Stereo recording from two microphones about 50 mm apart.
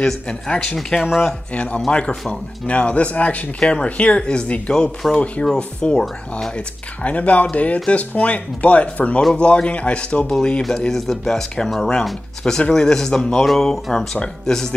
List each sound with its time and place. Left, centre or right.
0.0 s speech: centre
0.7 s speech: centre
1.5 s speech: left
10.9 s speech: centre